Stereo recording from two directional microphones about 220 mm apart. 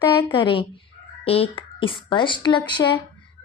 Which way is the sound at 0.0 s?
20° left (ahead or behind).